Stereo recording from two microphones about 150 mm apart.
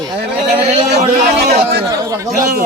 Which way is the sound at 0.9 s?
90° right.